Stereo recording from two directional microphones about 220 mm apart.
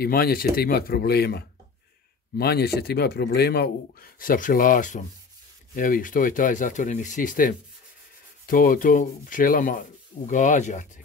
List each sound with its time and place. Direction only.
0.0 s speech: 45° left (ahead or behind)